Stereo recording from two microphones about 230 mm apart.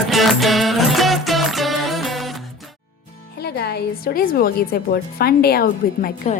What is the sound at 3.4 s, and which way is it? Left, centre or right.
A woman's voice, left.